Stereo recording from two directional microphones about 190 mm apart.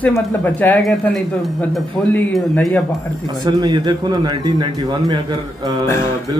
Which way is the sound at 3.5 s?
20° right (ahead or behind).